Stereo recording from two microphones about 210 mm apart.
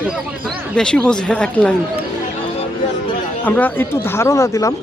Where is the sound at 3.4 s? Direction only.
10° left (ahead or behind).